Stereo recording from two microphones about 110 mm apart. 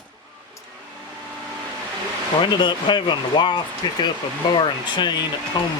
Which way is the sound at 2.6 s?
45° left (ahead or behind).